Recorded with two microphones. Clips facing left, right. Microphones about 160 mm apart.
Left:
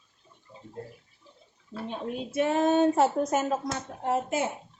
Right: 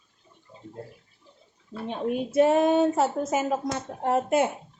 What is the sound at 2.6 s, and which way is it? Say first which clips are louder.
Speech: even; 5° right (ahead or behind).